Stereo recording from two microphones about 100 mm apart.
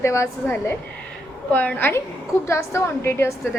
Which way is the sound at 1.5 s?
15° left (ahead or behind).